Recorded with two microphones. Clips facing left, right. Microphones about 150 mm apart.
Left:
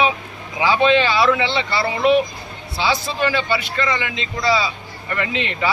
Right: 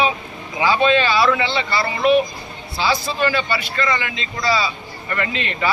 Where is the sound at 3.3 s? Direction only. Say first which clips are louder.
Left 1 dB; 20° left (ahead or behind).